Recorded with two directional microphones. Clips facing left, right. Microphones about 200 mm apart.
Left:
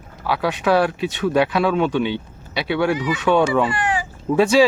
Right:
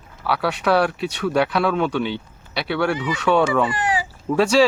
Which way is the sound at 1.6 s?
15° left (ahead or behind).